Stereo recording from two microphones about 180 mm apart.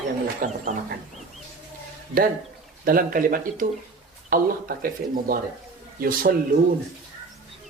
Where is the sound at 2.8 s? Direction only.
50° right (ahead or behind).